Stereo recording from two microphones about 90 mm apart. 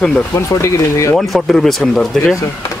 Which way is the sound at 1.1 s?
Centre (ahead or behind).